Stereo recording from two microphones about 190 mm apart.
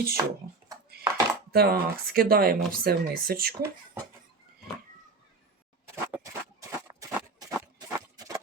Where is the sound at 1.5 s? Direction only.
55° right (ahead or behind).